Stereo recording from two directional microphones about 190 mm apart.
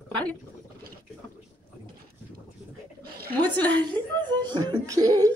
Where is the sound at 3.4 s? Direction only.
10° left (ahead or behind).